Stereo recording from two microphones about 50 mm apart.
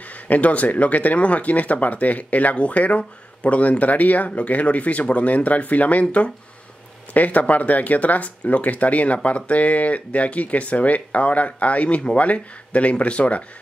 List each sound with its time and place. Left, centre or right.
0.0 s speech: left